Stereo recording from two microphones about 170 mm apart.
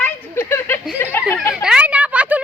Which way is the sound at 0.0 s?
15° left (ahead or behind).